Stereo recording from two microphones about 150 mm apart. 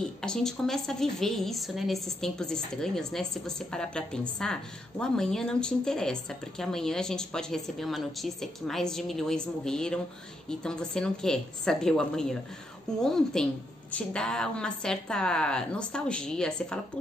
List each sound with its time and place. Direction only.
0.0 s a woman's voice: 5° left (ahead or behind)